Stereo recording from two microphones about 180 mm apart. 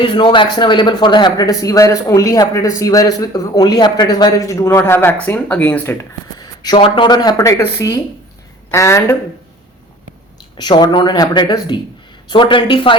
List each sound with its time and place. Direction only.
0.0 s speech: 25° left (ahead or behind)
10.6 s speech: 25° left (ahead or behind)